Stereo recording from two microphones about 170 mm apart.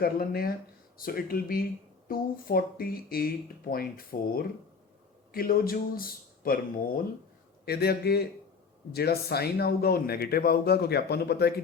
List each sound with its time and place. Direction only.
0.0 s a man's voice: 60° left (ahead or behind)
7.6 s speech: 65° left (ahead or behind)